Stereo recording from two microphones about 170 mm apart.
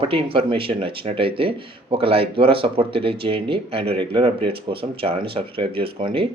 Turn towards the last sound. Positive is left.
turn(degrees=-30)  # may be behind; listen again after turning